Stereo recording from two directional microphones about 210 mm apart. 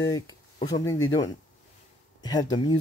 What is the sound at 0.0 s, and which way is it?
Speech, 20° left (ahead or behind).